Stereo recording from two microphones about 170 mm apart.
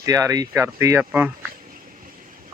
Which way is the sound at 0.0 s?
20° right (ahead or behind).